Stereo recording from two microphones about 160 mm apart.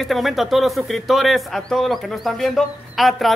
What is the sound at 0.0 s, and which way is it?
A man's voice, centre (ahead or behind).